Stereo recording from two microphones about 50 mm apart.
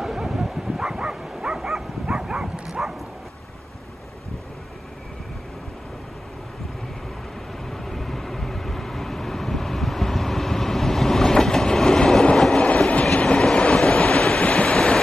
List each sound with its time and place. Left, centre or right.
0.0 s bow-wow: centre
7.7 s vehicle: centre
12.6 s train: left
13.2 s train: centre
14.5 s waves: left